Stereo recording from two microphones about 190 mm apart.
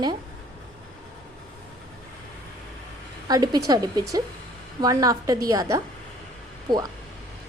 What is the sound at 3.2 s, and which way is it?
A woman's voice, 20° right (ahead or behind).